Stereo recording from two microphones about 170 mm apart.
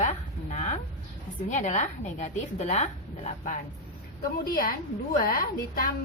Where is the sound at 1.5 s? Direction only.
45° left (ahead or behind).